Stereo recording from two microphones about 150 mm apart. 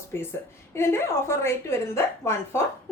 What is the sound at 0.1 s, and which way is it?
A woman's voice, 15° left (ahead or behind).